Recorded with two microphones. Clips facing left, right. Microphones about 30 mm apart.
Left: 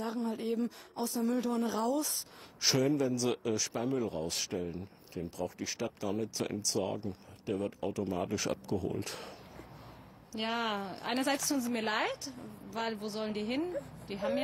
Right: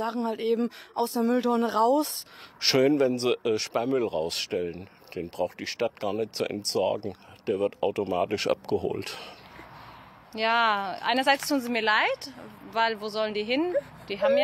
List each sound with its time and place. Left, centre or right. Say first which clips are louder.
0.0 s speech: right 7 dB; right
10.3 s speech: right 11 dB; right